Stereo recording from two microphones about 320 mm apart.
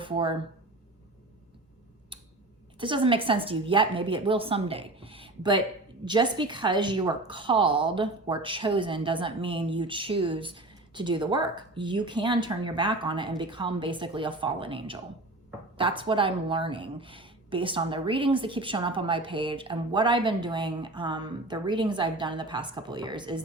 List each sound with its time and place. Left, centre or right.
0.0 s speech: centre
2.1 s a sound: centre
2.7 s a woman's voice: centre